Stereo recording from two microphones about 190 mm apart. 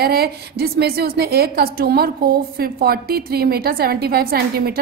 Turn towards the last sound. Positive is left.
turn(degrees=-55)  # may be behind; listen again after turning